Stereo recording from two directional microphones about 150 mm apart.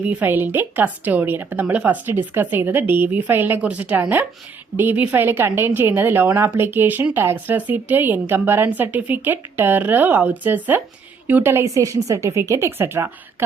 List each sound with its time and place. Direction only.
0.0 s a woman's voice: 10° right (ahead or behind)